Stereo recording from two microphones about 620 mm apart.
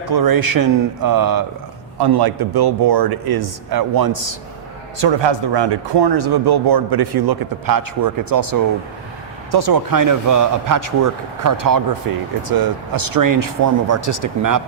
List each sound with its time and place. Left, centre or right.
0.0 s speech: right